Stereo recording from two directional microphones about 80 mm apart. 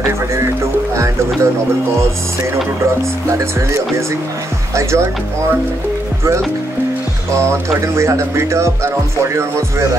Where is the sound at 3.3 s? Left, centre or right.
Right.